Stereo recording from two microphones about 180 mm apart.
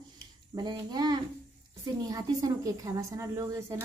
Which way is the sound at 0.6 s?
25° right (ahead or behind).